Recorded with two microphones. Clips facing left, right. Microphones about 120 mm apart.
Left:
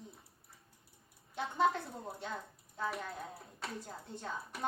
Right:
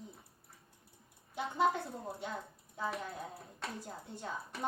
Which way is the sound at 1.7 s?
Centre (ahead or behind).